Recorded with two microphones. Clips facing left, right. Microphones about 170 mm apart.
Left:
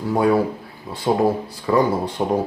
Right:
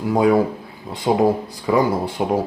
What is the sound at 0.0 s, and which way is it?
Speech, 15° right (ahead or behind).